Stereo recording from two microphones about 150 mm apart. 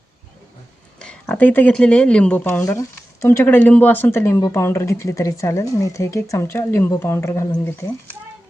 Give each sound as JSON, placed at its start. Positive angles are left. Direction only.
{"t": 0.9, "sound": "speech", "side_deg": 10}